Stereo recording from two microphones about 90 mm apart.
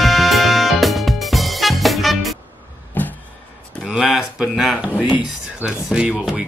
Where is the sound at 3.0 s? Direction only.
20° left (ahead or behind).